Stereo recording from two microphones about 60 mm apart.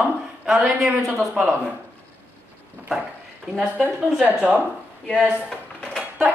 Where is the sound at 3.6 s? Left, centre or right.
Centre.